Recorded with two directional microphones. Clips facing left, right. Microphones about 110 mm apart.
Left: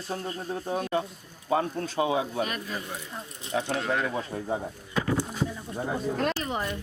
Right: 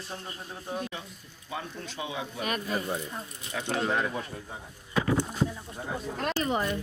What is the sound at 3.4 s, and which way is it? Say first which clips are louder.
Speech: left 6 dB; 30° left (ahead or behind).